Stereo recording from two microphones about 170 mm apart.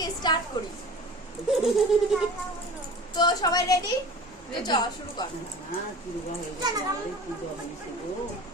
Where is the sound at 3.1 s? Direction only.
25° left (ahead or behind).